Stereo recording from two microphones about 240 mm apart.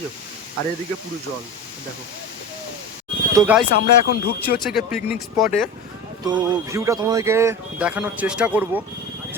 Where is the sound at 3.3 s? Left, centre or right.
Centre.